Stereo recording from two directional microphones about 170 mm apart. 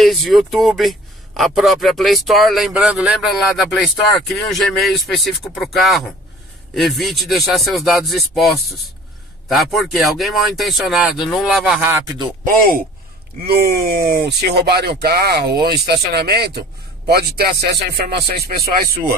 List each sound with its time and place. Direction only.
0.0 s speech: centre (ahead or behind)
11.8 s speech: 15° right (ahead or behind)
13.5 s speech: 65° right (ahead or behind)